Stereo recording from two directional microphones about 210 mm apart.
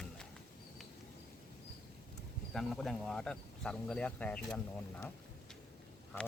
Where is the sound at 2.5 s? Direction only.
Centre (ahead or behind).